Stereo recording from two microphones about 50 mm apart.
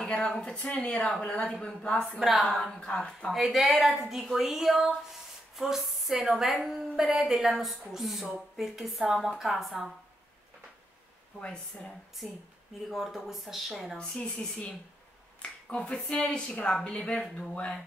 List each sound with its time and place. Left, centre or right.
0.4 s speech: centre
2.1 s a woman's voice: centre
2.8 s speech: centre
3.3 s a woman's voice: centre
5.6 s a sound: centre
6.2 s a woman's voice: centre
11.3 s speech: centre
12.9 s a woman's voice: centre
13.9 s speech: left
15.7 s speech: left